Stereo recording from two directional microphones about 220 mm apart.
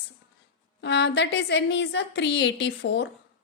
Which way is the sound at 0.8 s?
50° left (ahead or behind).